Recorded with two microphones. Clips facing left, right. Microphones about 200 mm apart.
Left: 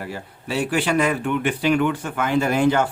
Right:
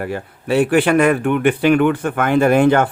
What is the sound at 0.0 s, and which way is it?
Speech, 60° right (ahead or behind).